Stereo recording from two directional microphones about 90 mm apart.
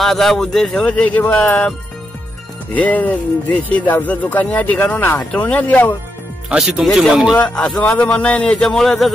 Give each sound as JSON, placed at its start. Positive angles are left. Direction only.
{"t": 0.0, "sound": "speech", "side_deg": 0}
{"t": 6.5, "sound": "speech", "side_deg": -10}
{"t": 7.4, "sound": "speech", "side_deg": 10}